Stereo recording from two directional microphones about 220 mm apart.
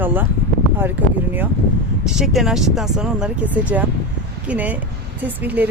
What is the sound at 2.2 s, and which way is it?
Speech, centre (ahead or behind).